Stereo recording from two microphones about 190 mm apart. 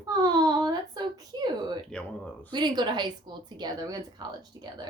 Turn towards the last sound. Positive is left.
turn(degrees=-20)  # may be behind; listen again after turning